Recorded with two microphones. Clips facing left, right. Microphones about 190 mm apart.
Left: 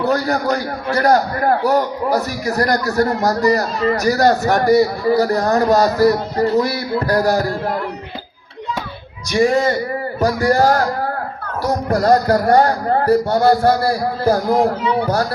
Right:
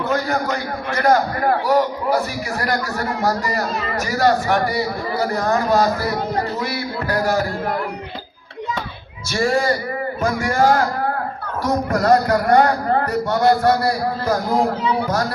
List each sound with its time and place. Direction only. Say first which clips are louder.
0.0 s a man's voice: left 3 dB; 35° left (ahead or behind)
9.3 s a man's voice: left 4 dB; 20° left (ahead or behind)
10.2 s a man's voice: left 4 dB; 35° left (ahead or behind)
11.9 s a man's voice: left 3 dB; 35° left (ahead or behind)